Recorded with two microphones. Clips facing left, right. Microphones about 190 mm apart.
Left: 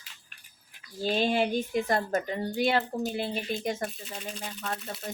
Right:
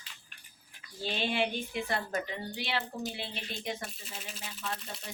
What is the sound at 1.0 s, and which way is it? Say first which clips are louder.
Speech: left 6 dB; 40° left (ahead or behind).